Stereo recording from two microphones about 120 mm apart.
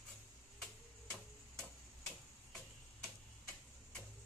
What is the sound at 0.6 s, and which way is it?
Tick-tock, 5° left (ahead or behind).